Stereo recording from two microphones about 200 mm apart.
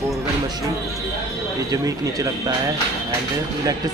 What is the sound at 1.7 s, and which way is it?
Speech, 15° right (ahead or behind).